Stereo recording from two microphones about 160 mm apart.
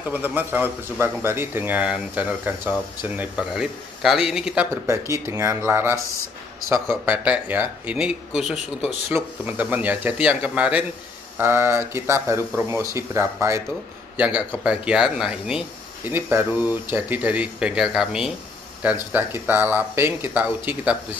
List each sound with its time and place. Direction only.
0.1 s speech: 10° right (ahead or behind)
4.8 s speech: 15° right (ahead or behind)
7.1 s a man's voice: 10° right (ahead or behind)